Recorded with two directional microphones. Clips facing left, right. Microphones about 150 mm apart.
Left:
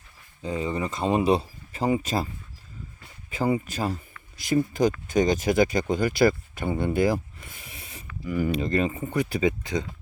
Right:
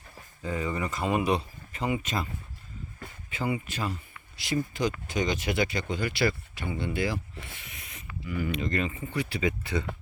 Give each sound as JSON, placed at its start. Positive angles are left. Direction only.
{"t": 0.4, "sound": "speech", "side_deg": 25}
{"t": 3.2, "sound": "speech", "side_deg": 40}
{"t": 9.4, "sound": "speech", "side_deg": 20}